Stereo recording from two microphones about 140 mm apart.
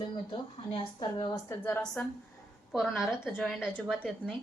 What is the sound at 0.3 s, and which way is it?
Speech, 35° left (ahead or behind).